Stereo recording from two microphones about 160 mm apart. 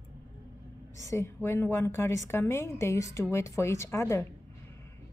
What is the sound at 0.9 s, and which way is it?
A woman's voice, 15° left (ahead or behind).